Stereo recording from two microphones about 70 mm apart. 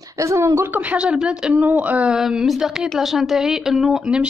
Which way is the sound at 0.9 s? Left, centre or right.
Centre.